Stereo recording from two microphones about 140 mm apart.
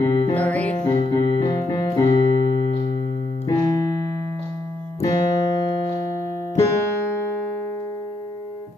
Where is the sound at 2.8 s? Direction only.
45° left (ahead or behind).